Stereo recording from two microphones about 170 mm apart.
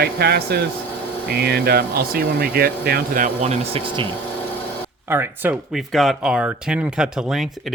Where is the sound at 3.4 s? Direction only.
35° right (ahead or behind).